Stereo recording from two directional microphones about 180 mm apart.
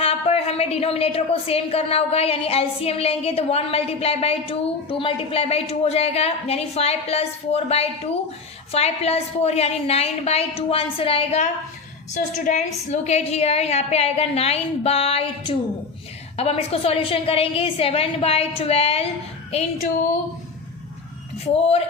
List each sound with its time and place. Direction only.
0.0 s speech: 35° left (ahead or behind)